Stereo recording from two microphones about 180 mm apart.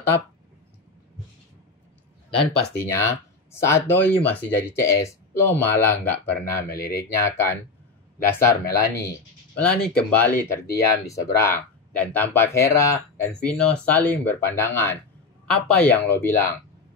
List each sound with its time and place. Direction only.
2.9 s speech: 15° left (ahead or behind)
6.7 s speech: 60° left (ahead or behind)
7.0 s speech: 15° left (ahead or behind)
9.6 s speech: 5° left (ahead or behind)